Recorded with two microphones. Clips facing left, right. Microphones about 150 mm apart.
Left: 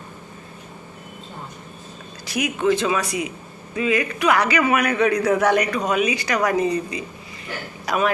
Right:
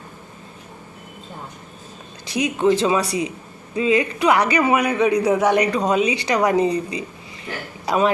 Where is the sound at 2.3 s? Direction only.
30° right (ahead or behind).